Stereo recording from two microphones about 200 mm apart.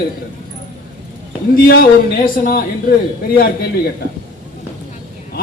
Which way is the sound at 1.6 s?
45° left (ahead or behind).